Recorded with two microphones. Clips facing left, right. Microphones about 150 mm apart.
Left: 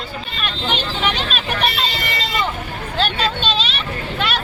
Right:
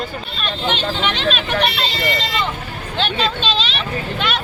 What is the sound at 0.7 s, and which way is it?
Hubbub, 5° left (ahead or behind).